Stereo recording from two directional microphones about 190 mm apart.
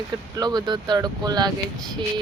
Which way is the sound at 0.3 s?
20° right (ahead or behind).